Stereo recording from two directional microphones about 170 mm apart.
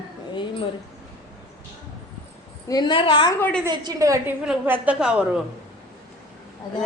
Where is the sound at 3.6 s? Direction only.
25° right (ahead or behind).